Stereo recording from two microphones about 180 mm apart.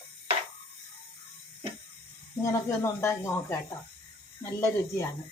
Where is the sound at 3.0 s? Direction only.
15° left (ahead or behind).